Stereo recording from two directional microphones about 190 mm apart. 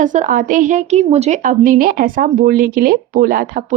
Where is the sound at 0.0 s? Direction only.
40° right (ahead or behind).